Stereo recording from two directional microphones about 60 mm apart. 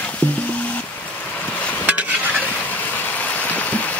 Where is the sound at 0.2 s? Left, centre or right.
Left.